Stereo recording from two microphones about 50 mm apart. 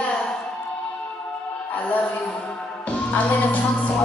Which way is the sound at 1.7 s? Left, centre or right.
Left.